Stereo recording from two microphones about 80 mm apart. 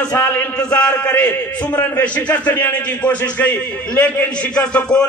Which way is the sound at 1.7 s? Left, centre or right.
Centre.